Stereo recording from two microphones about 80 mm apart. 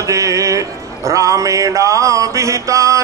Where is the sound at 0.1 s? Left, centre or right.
Right.